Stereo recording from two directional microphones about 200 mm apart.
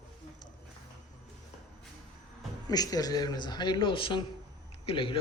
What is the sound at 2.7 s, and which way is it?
Speech, 20° left (ahead or behind).